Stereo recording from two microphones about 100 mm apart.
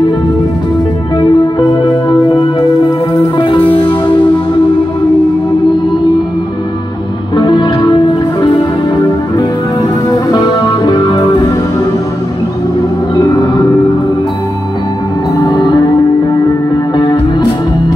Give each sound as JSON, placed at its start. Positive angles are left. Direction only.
{"t": 1.1, "sound": "music", "side_deg": 45}
{"t": 3.3, "sound": "music", "side_deg": 60}
{"t": 7.3, "sound": "music", "side_deg": 50}
{"t": 9.8, "sound": "music", "side_deg": 40}
{"t": 13.1, "sound": "gong", "side_deg": 45}
{"t": 15.3, "sound": "music", "side_deg": 45}
{"t": 16.9, "sound": "music", "side_deg": 50}